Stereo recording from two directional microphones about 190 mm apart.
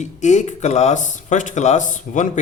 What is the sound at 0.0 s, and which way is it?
A man's voice, 40° left (ahead or behind).